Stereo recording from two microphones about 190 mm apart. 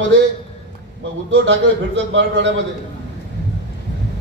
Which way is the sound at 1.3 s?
70° right (ahead or behind).